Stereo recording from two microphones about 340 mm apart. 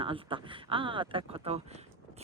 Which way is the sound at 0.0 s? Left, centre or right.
Centre.